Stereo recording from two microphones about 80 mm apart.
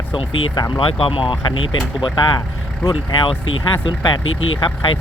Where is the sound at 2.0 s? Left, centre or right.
Left.